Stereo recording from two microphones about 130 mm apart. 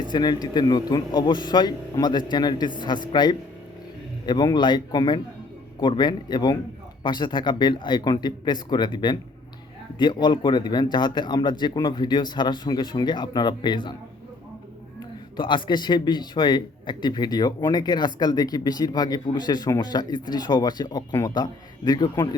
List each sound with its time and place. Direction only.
0.0 s a man's voice: 35° left (ahead or behind)
15.4 s a man's voice: 40° left (ahead or behind)